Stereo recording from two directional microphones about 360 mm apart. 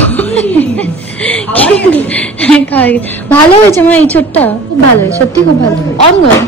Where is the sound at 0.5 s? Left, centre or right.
Centre.